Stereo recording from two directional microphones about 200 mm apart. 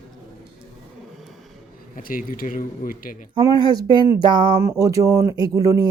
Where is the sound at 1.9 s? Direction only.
45° left (ahead or behind).